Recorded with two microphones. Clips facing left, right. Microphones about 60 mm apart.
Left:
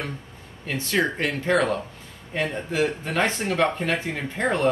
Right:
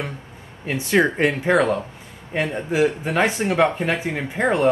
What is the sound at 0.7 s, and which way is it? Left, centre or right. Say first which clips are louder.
Speech: right 5 dB; centre.